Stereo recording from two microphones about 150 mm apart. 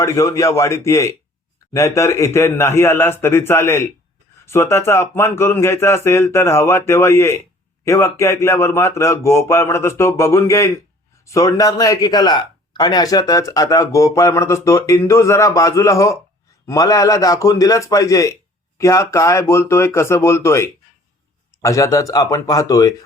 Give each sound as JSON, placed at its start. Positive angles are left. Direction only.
{"t": 0.0, "sound": "speech", "side_deg": 20}